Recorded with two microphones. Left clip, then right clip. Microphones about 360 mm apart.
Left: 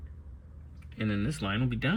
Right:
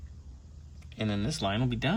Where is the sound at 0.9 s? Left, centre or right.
Centre.